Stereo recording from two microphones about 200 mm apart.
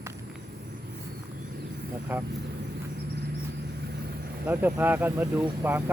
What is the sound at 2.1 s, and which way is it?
Speech, 10° right (ahead or behind).